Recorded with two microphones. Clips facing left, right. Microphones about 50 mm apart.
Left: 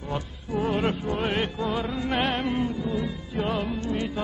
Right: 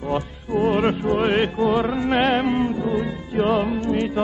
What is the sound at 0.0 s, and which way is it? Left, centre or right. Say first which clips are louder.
Music: right 8 dB; right.